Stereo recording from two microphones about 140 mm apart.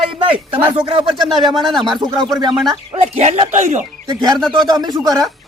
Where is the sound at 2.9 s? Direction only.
50° right (ahead or behind).